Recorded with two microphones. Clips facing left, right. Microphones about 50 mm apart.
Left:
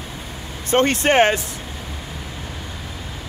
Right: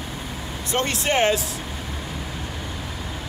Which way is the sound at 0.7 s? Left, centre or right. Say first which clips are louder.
Left 7 dB; left.